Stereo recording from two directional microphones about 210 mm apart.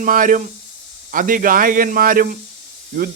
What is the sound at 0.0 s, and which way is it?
A man's voice, 40° right (ahead or behind).